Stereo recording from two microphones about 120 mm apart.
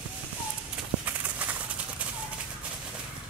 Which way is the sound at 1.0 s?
15° right (ahead or behind).